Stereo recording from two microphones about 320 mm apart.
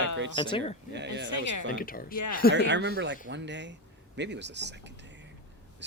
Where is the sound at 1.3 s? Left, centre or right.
Left.